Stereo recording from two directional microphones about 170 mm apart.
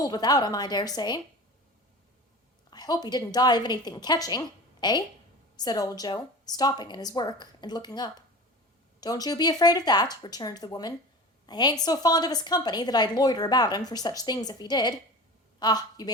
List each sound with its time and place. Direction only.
0.0 s a woman's voice: 25° left (ahead or behind)
2.6 s a woman's voice: 25° left (ahead or behind)